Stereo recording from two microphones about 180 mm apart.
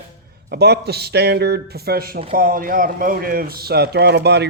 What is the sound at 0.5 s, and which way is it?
A man's voice, 65° right (ahead or behind).